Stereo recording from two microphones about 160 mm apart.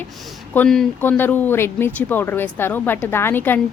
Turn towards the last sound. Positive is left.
turn(degrees=10)  # may be behind; listen again after turning